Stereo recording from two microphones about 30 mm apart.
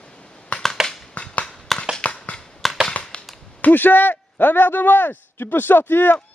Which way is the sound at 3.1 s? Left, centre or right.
Left.